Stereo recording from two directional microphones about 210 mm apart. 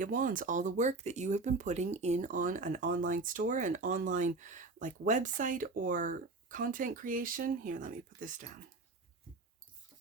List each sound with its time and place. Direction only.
0.0 s speech: 40° right (ahead or behind)